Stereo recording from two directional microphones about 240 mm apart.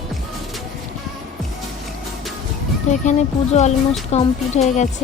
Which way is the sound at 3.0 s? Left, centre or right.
Left.